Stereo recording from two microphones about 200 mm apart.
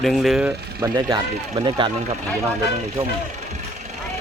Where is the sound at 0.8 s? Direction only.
20° right (ahead or behind).